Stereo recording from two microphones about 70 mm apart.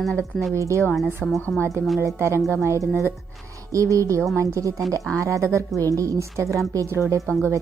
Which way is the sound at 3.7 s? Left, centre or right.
Right.